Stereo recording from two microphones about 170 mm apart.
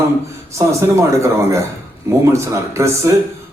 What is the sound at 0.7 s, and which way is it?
Speech, 15° right (ahead or behind).